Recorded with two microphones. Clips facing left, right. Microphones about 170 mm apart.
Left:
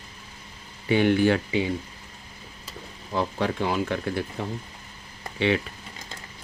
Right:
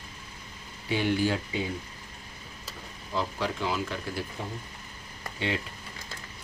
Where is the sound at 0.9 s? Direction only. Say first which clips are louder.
Left 7 dB; 60° left (ahead or behind).